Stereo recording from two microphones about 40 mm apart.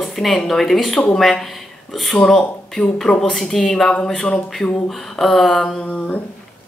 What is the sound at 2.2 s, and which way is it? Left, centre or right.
A woman's voice, centre.